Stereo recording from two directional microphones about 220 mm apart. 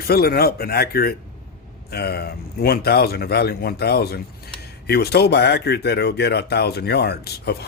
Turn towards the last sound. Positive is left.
turn(degrees=45)  # may be behind; listen again after turning